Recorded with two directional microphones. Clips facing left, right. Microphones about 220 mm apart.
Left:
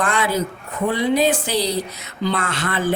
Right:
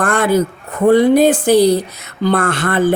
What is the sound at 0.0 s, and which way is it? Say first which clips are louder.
A man's voice: right 7 dB; 50° right (ahead or behind).